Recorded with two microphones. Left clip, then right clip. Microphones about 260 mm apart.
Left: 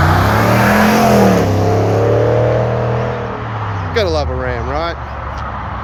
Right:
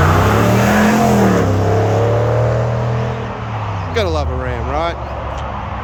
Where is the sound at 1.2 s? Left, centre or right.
Left.